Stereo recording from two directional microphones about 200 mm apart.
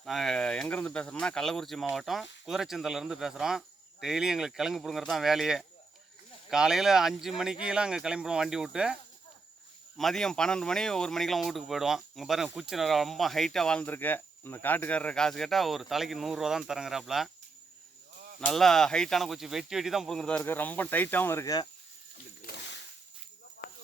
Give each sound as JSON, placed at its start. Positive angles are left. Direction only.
{"t": 0.0, "sound": "speech", "side_deg": 0}
{"t": 10.0, "sound": "speech", "side_deg": 0}
{"t": 18.3, "sound": "speech", "side_deg": 5}
{"t": 22.4, "sound": "a sound", "side_deg": 55}